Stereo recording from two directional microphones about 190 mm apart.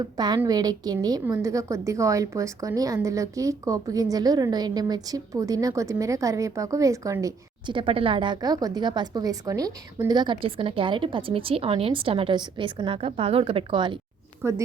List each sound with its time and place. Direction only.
0.0 s a woman's voice: 20° right (ahead or behind)
14.4 s speech: 15° right (ahead or behind)